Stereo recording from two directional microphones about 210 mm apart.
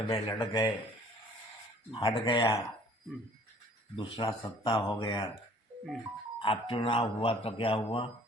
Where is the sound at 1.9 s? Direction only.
25° left (ahead or behind).